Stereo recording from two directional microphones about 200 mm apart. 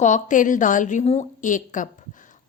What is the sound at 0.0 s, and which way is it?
Speech, 40° left (ahead or behind).